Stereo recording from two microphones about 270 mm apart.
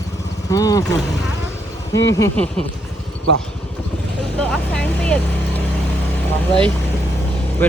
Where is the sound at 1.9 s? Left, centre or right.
Left.